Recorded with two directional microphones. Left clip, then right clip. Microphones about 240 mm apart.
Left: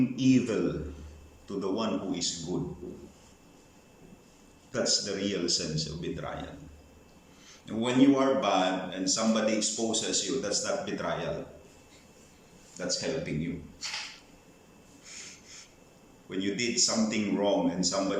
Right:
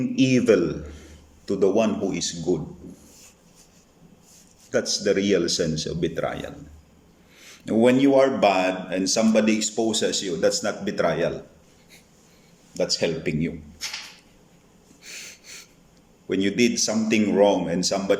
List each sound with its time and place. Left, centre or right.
0.2 s a man's voice: right
4.7 s a man's voice: right
7.4 s a man's voice: right
12.7 s a man's voice: right
16.3 s a man's voice: right